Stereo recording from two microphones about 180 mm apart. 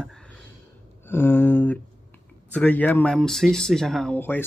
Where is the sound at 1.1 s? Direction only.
10° left (ahead or behind).